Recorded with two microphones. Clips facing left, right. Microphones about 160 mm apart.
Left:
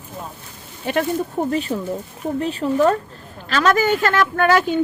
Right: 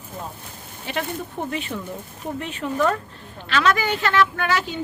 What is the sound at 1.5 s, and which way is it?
A woman's voice, 40° left (ahead or behind).